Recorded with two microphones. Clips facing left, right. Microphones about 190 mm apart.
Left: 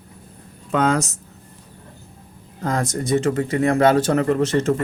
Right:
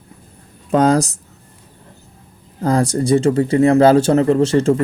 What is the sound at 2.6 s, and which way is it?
Speech, 35° right (ahead or behind).